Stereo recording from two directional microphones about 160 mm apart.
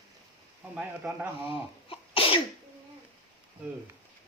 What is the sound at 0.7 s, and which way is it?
Speech, 10° right (ahead or behind).